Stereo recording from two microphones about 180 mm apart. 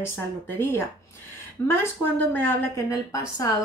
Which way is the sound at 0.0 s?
10° left (ahead or behind).